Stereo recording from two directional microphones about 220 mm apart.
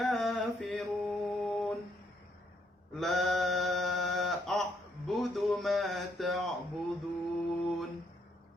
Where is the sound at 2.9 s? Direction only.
Centre (ahead or behind).